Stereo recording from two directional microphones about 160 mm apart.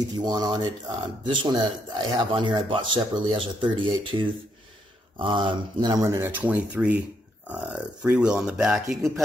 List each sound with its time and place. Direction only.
0.1 s speech: 25° right (ahead or behind)
6.2 s speech: 10° right (ahead or behind)